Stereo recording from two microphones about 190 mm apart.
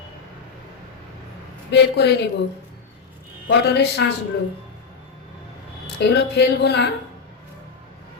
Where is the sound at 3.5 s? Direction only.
65° left (ahead or behind).